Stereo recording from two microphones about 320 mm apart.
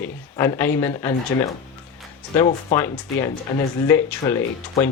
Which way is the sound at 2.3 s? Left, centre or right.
Centre.